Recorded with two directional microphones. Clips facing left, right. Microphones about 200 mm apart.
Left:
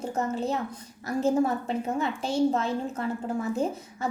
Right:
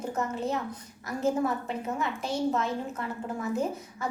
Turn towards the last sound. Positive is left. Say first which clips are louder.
# left 2 dB
turn(degrees=30)  # may be behind; listen again after turning